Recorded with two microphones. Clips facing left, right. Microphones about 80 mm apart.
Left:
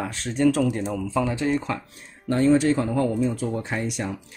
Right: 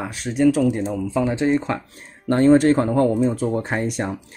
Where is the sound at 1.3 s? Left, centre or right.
Right.